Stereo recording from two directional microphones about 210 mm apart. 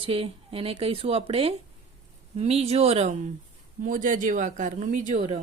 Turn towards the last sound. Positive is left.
turn(degrees=-35)  # may be behind; listen again after turning